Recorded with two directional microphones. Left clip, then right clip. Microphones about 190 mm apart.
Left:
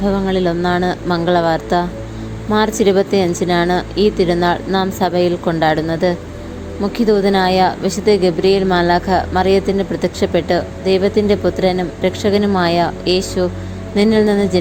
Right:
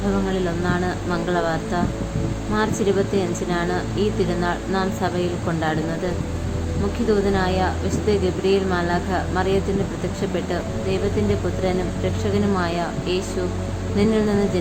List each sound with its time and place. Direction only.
0.3 s a woman's voice: 35° left (ahead or behind)
7.1 s a woman's voice: 35° left (ahead or behind)